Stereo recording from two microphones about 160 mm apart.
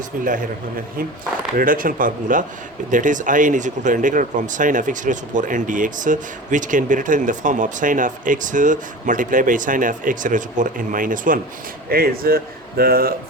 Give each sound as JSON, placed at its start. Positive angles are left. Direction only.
{"t": 1.5, "sound": "speech", "side_deg": -60}
{"t": 11.9, "sound": "speech", "side_deg": -70}